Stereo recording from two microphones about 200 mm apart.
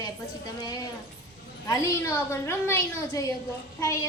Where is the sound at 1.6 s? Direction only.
15° left (ahead or behind).